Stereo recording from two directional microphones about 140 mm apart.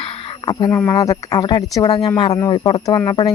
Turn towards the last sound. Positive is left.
turn(degrees=25)  # may be behind; listen again after turning